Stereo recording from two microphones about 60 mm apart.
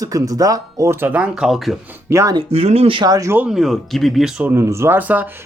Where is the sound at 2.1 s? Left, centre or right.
Right.